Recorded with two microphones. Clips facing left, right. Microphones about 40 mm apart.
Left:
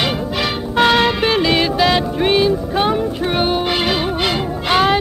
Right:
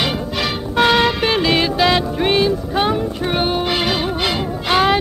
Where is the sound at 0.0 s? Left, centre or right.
Centre.